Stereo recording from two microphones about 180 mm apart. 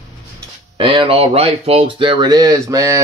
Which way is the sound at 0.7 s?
30° right (ahead or behind).